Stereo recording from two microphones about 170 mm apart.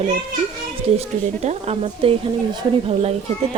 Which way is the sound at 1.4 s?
40° right (ahead or behind).